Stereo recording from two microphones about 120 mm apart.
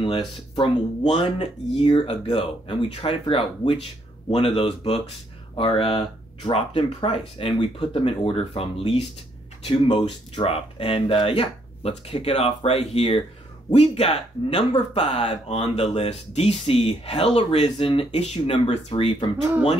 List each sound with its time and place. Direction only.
0.0 s speech: 45° left (ahead or behind)